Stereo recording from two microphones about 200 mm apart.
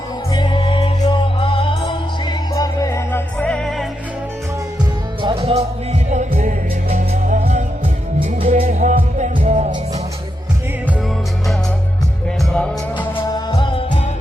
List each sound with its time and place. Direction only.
0.3 s music: 25° left (ahead or behind); by 3.8 s centre (ahead or behind)
5.2 s music: 30° right (ahead or behind)
12.5 s music: 5° left (ahead or behind)
13.1 s music: 20° left (ahead or behind)